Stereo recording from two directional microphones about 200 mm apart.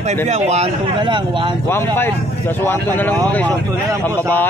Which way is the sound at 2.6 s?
10° left (ahead or behind).